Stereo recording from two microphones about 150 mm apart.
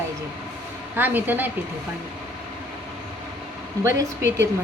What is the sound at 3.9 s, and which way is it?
Speech, 20° right (ahead or behind).